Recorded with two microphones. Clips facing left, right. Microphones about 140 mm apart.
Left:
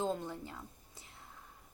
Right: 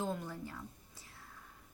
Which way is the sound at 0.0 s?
25° left (ahead or behind).